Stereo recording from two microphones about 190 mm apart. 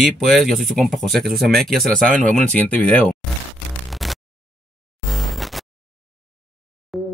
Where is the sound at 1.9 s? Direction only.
45° right (ahead or behind).